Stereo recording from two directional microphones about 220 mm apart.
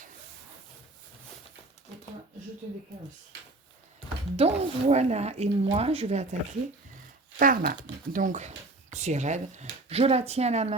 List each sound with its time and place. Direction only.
4.4 s speech: 30° right (ahead or behind)